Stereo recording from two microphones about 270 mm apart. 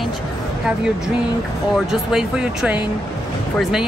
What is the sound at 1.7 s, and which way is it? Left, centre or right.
A woman's voice, centre.